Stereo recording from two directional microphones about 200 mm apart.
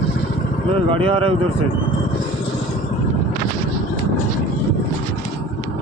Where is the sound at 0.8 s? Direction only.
25° right (ahead or behind).